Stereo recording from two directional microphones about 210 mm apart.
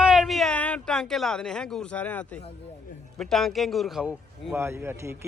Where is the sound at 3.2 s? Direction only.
Centre (ahead or behind).